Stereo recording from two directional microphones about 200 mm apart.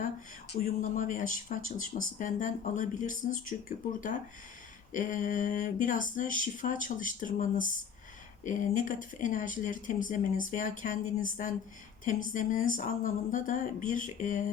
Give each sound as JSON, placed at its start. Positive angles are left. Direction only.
{"t": 0.5, "sound": "speech", "side_deg": 45}
{"t": 4.9, "sound": "speech", "side_deg": 40}